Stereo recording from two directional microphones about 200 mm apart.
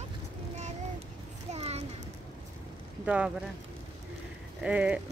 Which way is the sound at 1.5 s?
30° right (ahead or behind).